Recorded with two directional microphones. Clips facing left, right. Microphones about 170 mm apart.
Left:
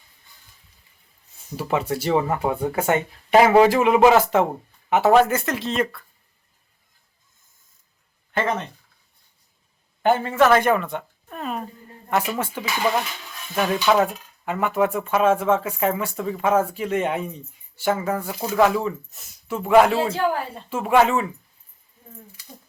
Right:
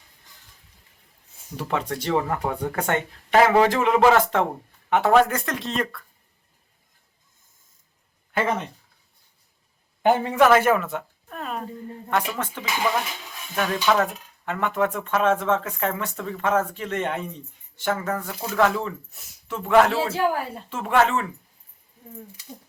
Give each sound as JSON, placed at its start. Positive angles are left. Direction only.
{"t": 0.3, "sound": "music", "side_deg": -90}
{"t": 1.5, "sound": "speech", "side_deg": 10}
{"t": 8.3, "sound": "speech", "side_deg": -5}
{"t": 10.0, "sound": "speech", "side_deg": -15}